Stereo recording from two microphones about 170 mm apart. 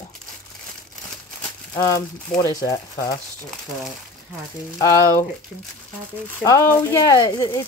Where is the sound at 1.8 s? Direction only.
20° left (ahead or behind).